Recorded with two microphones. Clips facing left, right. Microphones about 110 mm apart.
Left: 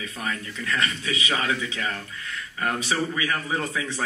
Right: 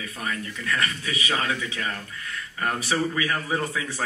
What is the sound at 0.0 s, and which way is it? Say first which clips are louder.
Speech: even; 20° left (ahead or behind).